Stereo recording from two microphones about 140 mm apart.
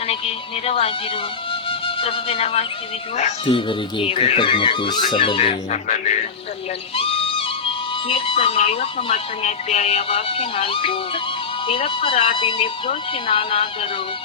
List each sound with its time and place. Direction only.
0.1 s speech: 45° left (ahead or behind)
6.9 s speech: 40° left (ahead or behind)